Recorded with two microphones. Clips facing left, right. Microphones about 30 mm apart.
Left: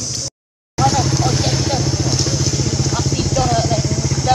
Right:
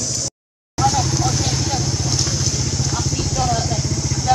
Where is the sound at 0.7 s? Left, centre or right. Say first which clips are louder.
Left 2 dB; centre.